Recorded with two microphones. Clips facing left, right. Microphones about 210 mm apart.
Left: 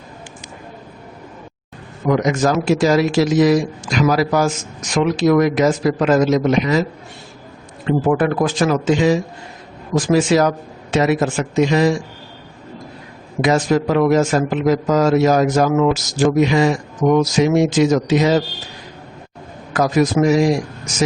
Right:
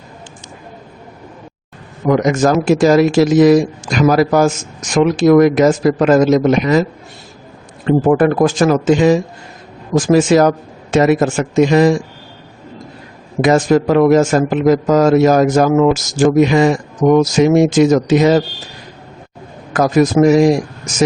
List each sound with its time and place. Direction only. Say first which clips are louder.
2.0 s a man's voice: right 4 dB; 50° right (ahead or behind)
7.9 s a man's voice: right 5 dB; 45° right (ahead or behind)
13.4 s a man's voice: right 4 dB; 50° right (ahead or behind)
19.7 s a man's voice: right 4 dB; 50° right (ahead or behind)